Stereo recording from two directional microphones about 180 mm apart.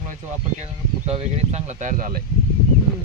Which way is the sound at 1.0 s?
35° right (ahead or behind).